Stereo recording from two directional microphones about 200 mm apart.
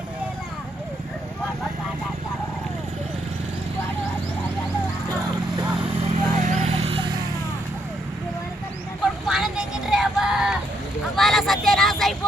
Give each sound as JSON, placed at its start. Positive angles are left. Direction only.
{"t": 6.0, "sound": "vehicle", "side_deg": -35}
{"t": 9.2, "sound": "vehicle", "side_deg": 0}